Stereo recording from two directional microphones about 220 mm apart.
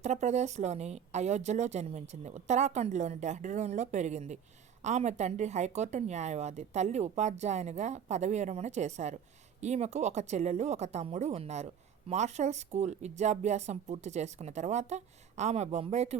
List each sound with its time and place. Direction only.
0.0 s a woman's voice: 30° right (ahead or behind)